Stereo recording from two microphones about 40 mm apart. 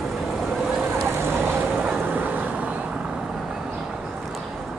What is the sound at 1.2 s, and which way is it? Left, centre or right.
Boat, right.